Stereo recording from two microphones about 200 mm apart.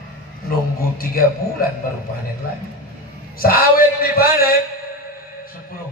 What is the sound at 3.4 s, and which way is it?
A man's voice, 45° left (ahead or behind).